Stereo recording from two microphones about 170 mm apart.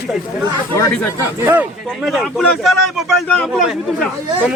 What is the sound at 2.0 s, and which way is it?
A man's voice, centre (ahead or behind).